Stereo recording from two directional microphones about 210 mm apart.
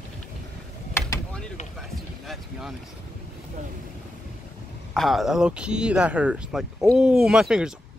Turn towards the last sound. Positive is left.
turn(degrees=-5)  # may be behind; listen again after turning